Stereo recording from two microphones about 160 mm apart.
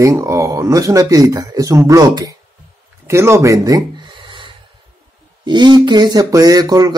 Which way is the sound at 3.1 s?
15° right (ahead or behind).